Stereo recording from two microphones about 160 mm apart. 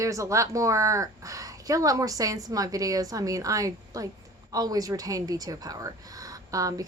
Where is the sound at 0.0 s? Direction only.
20° right (ahead or behind).